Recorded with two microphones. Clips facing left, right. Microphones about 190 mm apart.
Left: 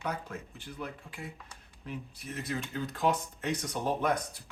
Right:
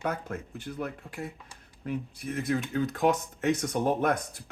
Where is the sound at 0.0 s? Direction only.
50° right (ahead or behind).